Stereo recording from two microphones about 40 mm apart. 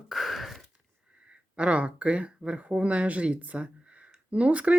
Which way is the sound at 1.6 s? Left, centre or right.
Right.